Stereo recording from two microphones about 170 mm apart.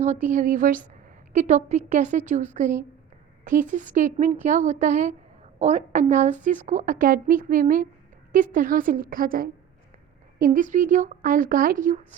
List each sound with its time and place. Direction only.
0.0 s a woman's voice: 45° right (ahead or behind)